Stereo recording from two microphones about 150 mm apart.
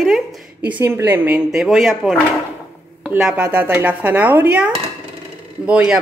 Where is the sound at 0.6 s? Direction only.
15° right (ahead or behind).